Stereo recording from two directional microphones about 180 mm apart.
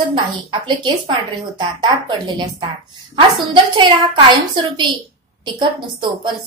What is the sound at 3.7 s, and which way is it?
A woman's voice, 25° right (ahead or behind).